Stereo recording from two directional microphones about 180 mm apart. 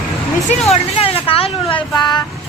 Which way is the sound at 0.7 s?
30° left (ahead or behind).